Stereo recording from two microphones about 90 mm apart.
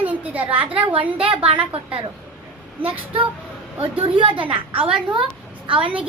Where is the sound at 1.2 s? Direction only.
80° right.